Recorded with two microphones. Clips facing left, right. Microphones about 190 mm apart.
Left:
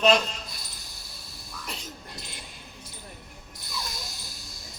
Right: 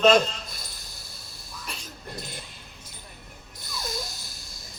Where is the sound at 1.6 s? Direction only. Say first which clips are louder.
Left 1 dB; 20° left (ahead or behind).